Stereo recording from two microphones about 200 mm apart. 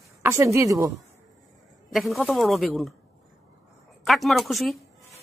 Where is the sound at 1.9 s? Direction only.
Centre (ahead or behind).